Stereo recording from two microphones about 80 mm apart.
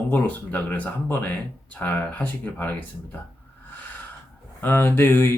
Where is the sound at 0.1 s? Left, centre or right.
Left.